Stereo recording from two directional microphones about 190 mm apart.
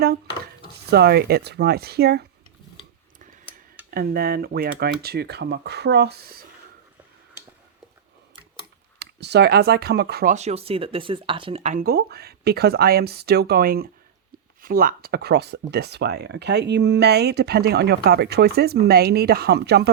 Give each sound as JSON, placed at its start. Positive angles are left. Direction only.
{"t": 0.9, "sound": "speech", "side_deg": -60}
{"t": 3.9, "sound": "speech", "side_deg": -55}
{"t": 9.0, "sound": "speech", "side_deg": -60}
{"t": 10.3, "sound": "speech", "side_deg": -35}
{"t": 11.9, "sound": "speech", "side_deg": -55}